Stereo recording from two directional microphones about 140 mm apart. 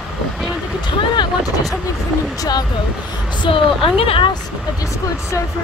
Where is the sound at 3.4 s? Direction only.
40° left (ahead or behind).